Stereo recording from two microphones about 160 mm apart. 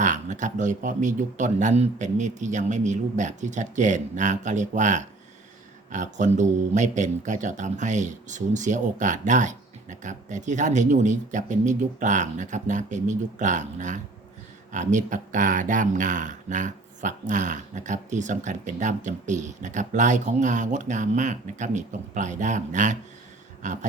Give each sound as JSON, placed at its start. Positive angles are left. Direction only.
{"t": 0.0, "sound": "speech", "side_deg": -50}